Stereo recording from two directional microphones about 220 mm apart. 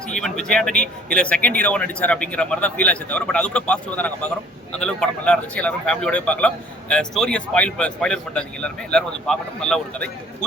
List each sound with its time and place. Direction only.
0.1 s speech: 5° left (ahead or behind)